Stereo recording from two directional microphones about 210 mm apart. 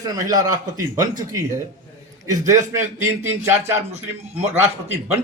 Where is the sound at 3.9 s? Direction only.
30° right (ahead or behind).